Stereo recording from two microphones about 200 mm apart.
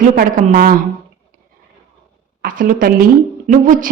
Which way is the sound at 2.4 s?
45° right (ahead or behind).